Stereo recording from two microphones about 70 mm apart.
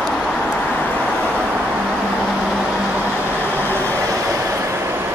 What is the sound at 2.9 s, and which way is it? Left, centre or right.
Vehicle, right.